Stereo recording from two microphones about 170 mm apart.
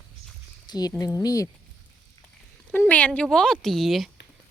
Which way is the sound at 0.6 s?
25° left (ahead or behind).